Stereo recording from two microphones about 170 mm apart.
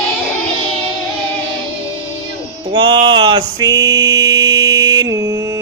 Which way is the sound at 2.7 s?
25° right (ahead or behind).